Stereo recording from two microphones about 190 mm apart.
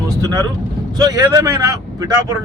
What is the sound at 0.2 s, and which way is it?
Speech, 20° right (ahead or behind).